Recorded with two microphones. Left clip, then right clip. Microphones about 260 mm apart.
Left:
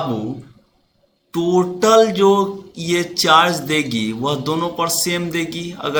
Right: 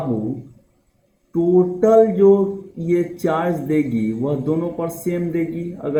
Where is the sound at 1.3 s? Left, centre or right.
Left.